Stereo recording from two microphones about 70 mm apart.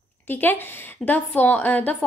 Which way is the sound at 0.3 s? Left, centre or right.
Left.